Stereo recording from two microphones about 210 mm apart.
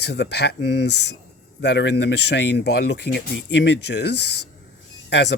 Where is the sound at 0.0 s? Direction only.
55° left (ahead or behind).